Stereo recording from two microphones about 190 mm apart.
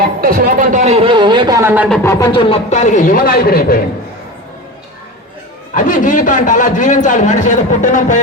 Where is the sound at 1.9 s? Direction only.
15° left (ahead or behind); by 3.8 s 50° left (ahead or behind).